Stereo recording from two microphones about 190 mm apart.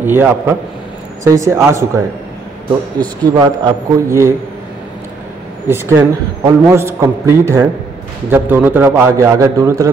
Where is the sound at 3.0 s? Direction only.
20° right (ahead or behind).